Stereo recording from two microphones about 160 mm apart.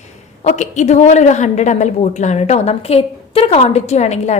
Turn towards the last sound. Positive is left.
turn(degrees=45)  # may be behind; listen again after turning